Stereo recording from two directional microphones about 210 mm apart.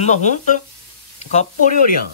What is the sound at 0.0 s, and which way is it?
Speech, 35° left (ahead or behind).